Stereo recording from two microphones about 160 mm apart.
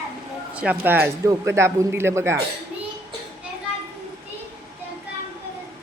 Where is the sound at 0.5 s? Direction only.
10° right (ahead or behind).